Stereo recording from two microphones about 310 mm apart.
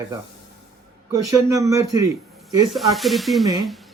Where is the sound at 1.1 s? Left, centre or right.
Centre.